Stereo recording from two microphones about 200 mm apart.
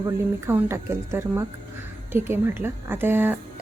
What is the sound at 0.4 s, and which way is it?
A woman's voice, 15° right (ahead or behind).